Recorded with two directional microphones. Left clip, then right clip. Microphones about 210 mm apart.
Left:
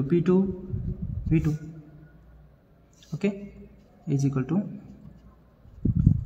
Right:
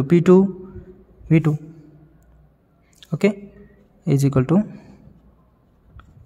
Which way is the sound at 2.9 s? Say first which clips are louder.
Right 10 dB; 50° right (ahead or behind).